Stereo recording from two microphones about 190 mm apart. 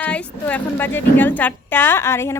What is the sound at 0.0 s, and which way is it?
A woman's voice, 10° left (ahead or behind).